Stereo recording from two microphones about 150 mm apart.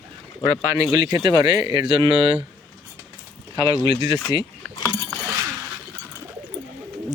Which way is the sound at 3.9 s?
35° right (ahead or behind).